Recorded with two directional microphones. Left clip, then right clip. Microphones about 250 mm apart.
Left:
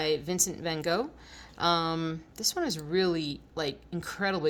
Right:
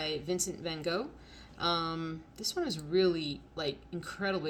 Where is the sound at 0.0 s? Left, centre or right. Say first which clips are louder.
Left 5 dB; left.